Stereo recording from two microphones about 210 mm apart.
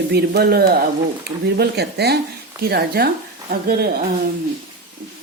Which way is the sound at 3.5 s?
45° right (ahead or behind).